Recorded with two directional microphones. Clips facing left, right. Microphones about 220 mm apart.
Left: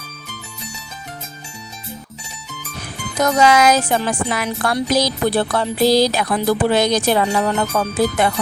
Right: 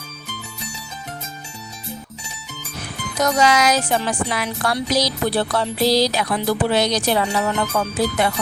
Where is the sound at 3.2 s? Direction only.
55° left (ahead or behind).